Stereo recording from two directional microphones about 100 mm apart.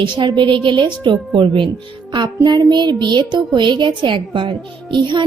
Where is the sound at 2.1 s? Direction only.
45° right (ahead or behind).